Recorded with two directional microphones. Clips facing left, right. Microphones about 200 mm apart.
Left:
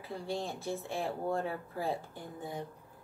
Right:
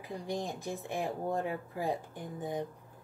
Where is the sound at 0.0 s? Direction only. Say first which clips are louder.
Right 1 dB; 15° right (ahead or behind).